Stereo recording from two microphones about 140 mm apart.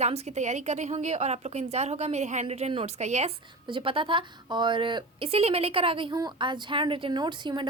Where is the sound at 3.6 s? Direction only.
40° right (ahead or behind).